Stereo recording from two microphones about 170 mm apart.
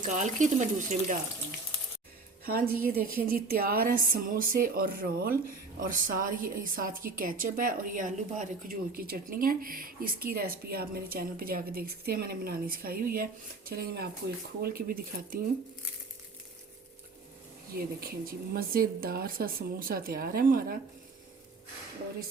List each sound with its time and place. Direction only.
0.0 s speech: 50° right (ahead or behind)
2.4 s a woman's voice: 60° right (ahead or behind)
18.0 s a woman's voice: 60° right (ahead or behind)